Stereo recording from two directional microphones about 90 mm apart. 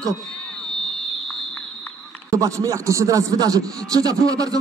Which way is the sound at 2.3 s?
40° right (ahead or behind).